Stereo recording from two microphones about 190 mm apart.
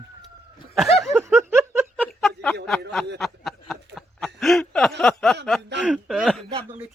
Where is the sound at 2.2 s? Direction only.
5° left (ahead or behind).